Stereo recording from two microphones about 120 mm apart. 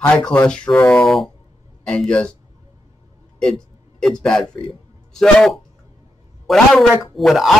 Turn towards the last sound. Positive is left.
turn(degrees=0)  # may be behind; listen again after turning